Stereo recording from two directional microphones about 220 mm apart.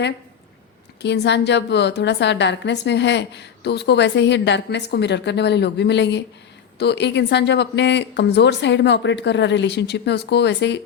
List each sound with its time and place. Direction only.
1.0 s a woman's voice: 50° left (ahead or behind)